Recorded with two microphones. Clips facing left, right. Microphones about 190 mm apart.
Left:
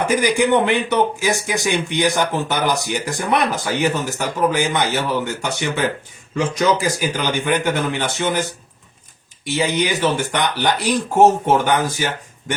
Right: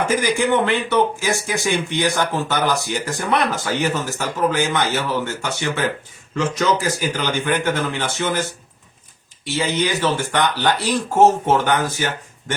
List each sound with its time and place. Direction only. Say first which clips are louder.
0.2 s speech: left 2 dB; 15° left (ahead or behind)